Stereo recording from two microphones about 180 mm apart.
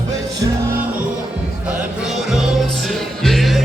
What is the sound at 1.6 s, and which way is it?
Music, 5° right (ahead or behind).